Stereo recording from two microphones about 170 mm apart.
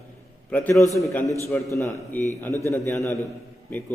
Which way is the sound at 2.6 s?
15° left (ahead or behind).